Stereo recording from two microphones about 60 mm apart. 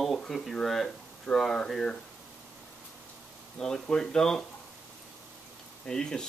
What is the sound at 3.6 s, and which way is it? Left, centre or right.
Speech, centre.